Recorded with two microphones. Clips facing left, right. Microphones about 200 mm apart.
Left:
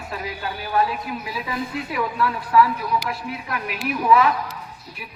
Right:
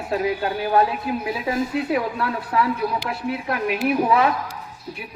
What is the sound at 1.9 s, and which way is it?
Speech, 60° right (ahead or behind).